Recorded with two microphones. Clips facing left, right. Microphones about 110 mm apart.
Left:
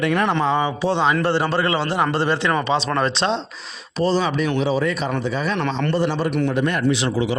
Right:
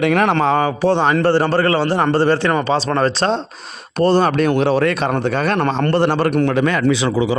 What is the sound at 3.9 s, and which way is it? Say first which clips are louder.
A man's voice: right 5 dB; 60° right (ahead or behind).